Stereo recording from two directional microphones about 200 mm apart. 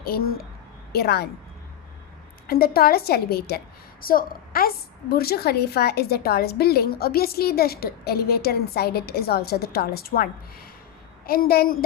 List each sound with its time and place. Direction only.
0.0 s a woman's voice: 50° left (ahead or behind)
2.5 s a woman's voice: 50° left (ahead or behind)